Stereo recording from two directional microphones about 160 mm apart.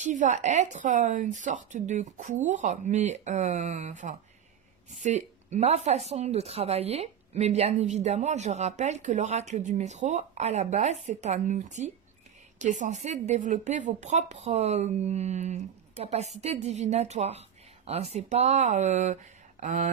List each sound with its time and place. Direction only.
0.0 s a woman's voice: 50° right (ahead or behind)